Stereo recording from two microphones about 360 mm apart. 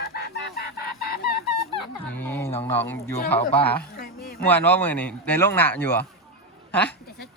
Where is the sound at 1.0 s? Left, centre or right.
Left.